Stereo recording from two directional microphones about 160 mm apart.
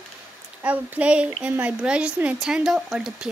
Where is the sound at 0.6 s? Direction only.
10° right (ahead or behind).